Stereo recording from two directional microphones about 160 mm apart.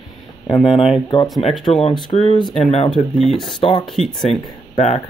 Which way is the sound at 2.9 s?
Centre (ahead or behind).